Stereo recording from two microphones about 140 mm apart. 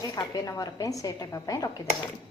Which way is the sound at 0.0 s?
25° left (ahead or behind).